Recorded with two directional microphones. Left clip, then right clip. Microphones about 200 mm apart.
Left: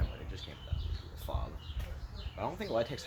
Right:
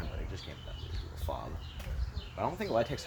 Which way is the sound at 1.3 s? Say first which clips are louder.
Right 3 dB; 20° right (ahead or behind).